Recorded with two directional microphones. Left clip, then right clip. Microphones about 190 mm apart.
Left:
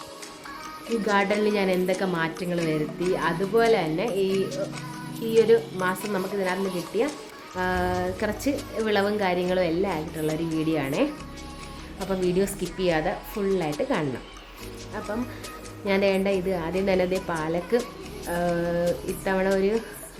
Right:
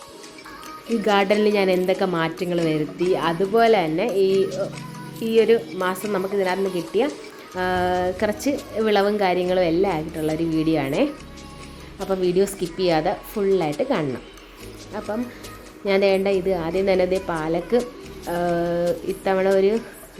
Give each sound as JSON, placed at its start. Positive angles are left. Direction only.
{"t": 1.0, "sound": "a woman's voice", "side_deg": -15}
{"t": 4.4, "sound": "speech", "side_deg": 0}
{"t": 5.4, "sound": "a woman's voice", "side_deg": -15}
{"t": 13.4, "sound": "speech", "side_deg": 0}
{"t": 13.8, "sound": "a woman's voice", "side_deg": -10}
{"t": 15.9, "sound": "a woman's voice", "side_deg": -5}